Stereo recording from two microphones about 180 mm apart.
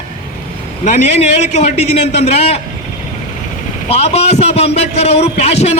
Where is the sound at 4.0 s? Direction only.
35° left (ahead or behind).